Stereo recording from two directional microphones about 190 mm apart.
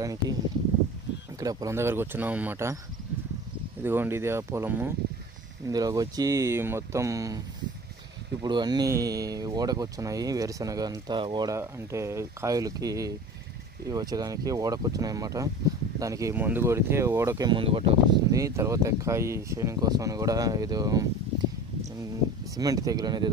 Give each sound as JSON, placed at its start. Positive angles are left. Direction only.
{"t": 0.0, "sound": "speech", "side_deg": -20}
{"t": 1.4, "sound": "speech", "side_deg": -20}
{"t": 3.8, "sound": "speech", "side_deg": -10}
{"t": 18.3, "sound": "speech", "side_deg": -15}
{"t": 22.6, "sound": "speech", "side_deg": -20}